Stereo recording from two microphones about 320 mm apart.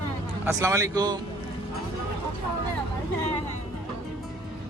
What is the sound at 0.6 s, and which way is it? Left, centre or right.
Speech, centre.